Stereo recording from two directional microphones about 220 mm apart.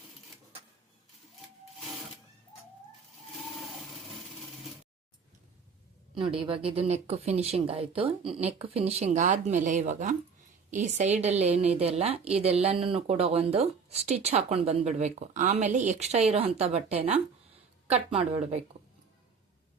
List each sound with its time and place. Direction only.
6.1 s a woman's voice: 25° right (ahead or behind)